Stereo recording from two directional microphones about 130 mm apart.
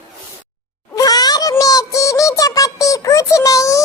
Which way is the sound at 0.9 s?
30° left (ahead or behind).